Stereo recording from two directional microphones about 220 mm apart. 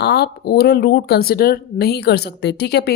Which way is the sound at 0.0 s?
50° left (ahead or behind).